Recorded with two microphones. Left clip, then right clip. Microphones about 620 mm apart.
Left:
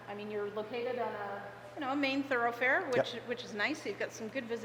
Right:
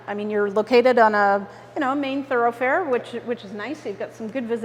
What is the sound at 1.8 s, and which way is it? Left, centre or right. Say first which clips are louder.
Speech: right 10 dB; right.